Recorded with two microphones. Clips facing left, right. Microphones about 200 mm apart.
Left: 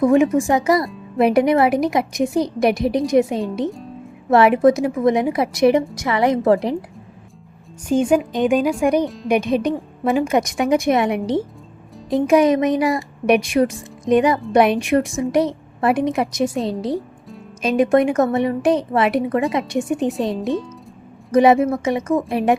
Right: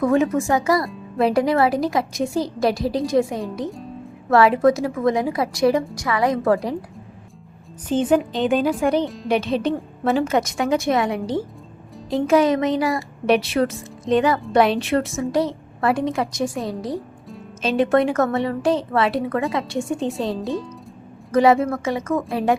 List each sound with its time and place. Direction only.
0.0 s a woman's voice: 15° left (ahead or behind)
7.9 s a woman's voice: 10° left (ahead or behind)